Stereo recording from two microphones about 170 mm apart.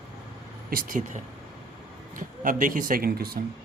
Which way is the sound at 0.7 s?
50° right (ahead or behind).